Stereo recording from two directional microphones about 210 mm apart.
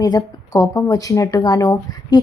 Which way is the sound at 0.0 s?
15° left (ahead or behind).